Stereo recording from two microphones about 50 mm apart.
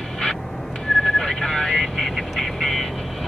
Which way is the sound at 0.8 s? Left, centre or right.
Centre.